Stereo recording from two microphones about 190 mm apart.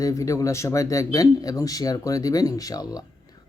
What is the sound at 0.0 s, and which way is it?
A man's voice, 15° left (ahead or behind).